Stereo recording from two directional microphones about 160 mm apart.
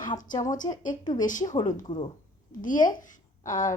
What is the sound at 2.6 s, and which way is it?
A woman's voice, 55° left (ahead or behind).